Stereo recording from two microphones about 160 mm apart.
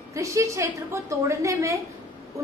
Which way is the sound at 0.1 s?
20° right (ahead or behind).